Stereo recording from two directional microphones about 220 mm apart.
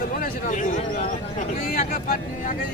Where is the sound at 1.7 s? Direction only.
40° left (ahead or behind).